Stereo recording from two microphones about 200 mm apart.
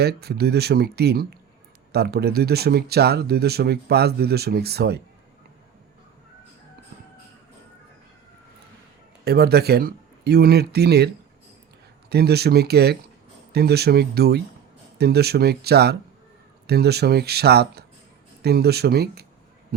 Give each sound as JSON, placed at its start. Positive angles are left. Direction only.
{"t": 0.0, "sound": "speech", "side_deg": -55}
{"t": 9.2, "sound": "speech", "side_deg": -50}